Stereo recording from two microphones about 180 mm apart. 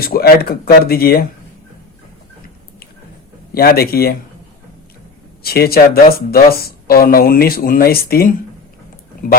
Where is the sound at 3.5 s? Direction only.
60° left (ahead or behind).